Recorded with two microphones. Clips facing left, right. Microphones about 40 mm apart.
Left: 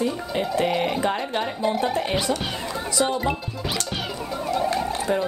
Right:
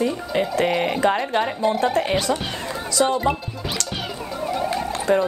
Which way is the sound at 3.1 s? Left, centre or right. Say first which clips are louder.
Right 3 dB; centre.